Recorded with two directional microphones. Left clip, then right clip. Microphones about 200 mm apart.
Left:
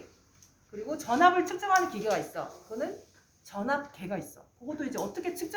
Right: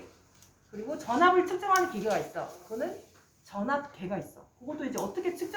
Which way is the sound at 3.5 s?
45° left (ahead or behind).